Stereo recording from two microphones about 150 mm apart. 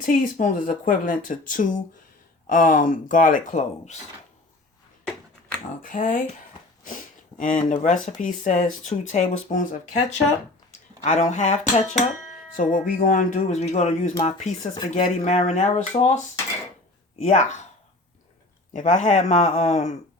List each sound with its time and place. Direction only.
0.0 s speech: 65° left (ahead or behind)
5.8 s speech: 60° left (ahead or behind)
10.7 s speech: 55° left (ahead or behind)
12.5 s speech: 65° left (ahead or behind)
17.2 s speech: 50° left (ahead or behind)
18.7 s speech: 50° left (ahead or behind)